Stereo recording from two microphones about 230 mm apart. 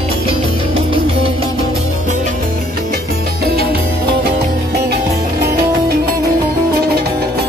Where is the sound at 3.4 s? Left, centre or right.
Right.